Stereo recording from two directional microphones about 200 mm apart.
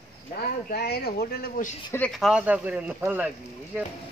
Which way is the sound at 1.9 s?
5° left (ahead or behind).